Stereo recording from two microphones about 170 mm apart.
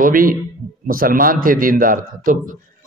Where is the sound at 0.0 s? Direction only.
55° right (ahead or behind).